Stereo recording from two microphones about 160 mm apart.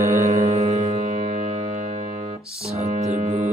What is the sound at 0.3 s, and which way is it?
Music, 45° right (ahead or behind).